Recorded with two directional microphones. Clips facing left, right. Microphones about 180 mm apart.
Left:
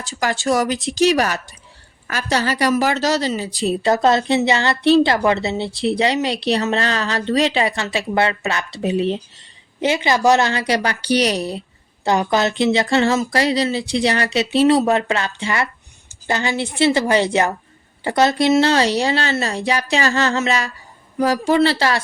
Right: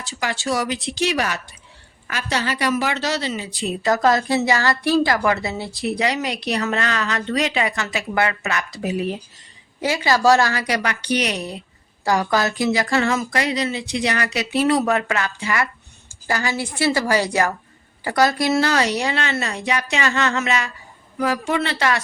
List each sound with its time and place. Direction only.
0.0 s a woman's voice: 45° left (ahead or behind)
12.0 s speech: 20° left (ahead or behind)